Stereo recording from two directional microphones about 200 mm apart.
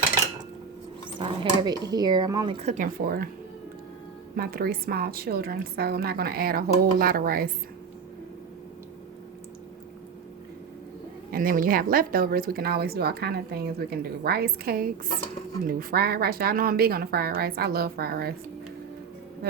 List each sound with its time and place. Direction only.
1.2 s speech: 25° right (ahead or behind)
2.6 s speech: 35° right (ahead or behind)
4.4 s speech: 50° right (ahead or behind)
11.3 s speech: 45° right (ahead or behind)